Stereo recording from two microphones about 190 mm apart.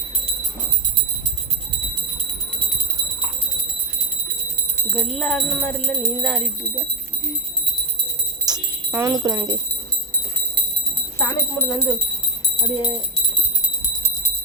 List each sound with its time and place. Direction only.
4.9 s speech: 5° left (ahead or behind)
8.4 s jingle bell: 15° right (ahead or behind)
11.2 s speech: 10° left (ahead or behind)